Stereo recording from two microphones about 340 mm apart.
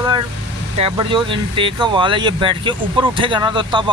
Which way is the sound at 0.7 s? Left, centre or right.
Centre.